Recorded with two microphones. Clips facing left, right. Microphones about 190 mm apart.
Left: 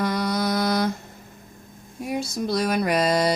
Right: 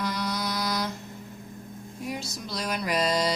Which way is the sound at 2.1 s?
55° left (ahead or behind).